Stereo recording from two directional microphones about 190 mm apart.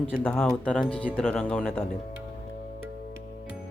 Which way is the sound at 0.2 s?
5° left (ahead or behind).